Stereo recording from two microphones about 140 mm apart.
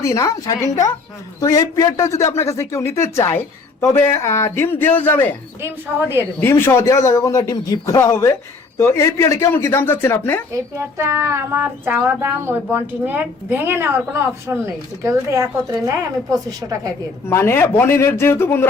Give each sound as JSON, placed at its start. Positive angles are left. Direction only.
{"t": 0.0, "sound": "a man's voice", "side_deg": 20}
{"t": 5.6, "sound": "speech", "side_deg": -15}
{"t": 6.4, "sound": "a man's voice", "side_deg": 15}
{"t": 10.5, "sound": "a woman's voice", "side_deg": -20}
{"t": 17.2, "sound": "speech", "side_deg": 20}